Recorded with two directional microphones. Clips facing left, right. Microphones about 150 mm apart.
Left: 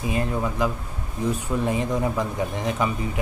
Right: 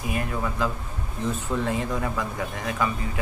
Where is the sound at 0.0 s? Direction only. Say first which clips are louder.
Left 3 dB; 25° left (ahead or behind).